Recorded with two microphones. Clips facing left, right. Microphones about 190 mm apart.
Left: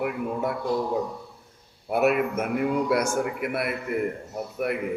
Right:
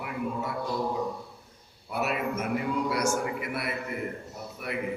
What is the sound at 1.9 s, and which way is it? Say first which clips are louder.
A man's voice: left 7 dB; 55° left (ahead or behind).